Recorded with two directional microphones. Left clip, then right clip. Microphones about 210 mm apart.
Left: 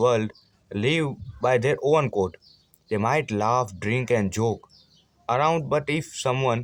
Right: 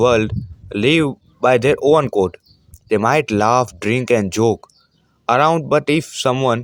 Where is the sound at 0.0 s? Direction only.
30° right (ahead or behind).